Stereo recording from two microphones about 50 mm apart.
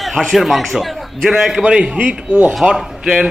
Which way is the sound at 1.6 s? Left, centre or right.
Centre.